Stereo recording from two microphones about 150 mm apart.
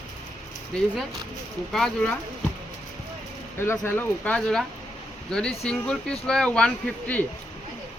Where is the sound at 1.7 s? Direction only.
5° left (ahead or behind).